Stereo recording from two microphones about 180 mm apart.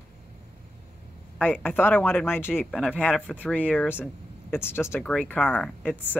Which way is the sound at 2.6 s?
Centre (ahead or behind).